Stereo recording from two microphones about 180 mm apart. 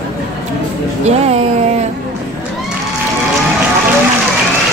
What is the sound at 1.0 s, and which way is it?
Speech, 35° right (ahead or behind).